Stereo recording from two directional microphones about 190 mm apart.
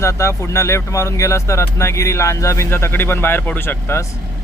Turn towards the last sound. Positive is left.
turn(degrees=15)  # may be behind; listen again after turning